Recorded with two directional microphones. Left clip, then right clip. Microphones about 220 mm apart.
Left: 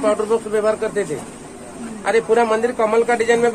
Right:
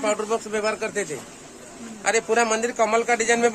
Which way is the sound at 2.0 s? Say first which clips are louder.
Left 5 dB; 50° right (ahead or behind).